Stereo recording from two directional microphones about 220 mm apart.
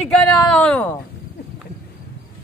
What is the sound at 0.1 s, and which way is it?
Speech, 5° left (ahead or behind).